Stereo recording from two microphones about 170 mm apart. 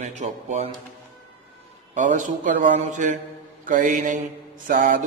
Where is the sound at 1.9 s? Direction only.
45° right (ahead or behind).